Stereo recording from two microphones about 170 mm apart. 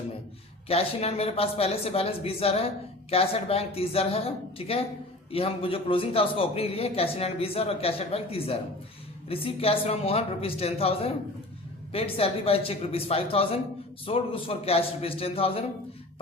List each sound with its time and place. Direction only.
0.7 s speech: 35° left (ahead or behind)